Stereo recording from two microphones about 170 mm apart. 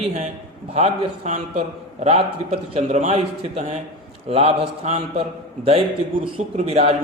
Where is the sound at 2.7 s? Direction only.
35° right (ahead or behind).